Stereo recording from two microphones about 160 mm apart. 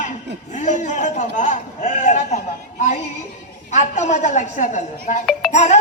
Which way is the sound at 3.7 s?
50° left (ahead or behind).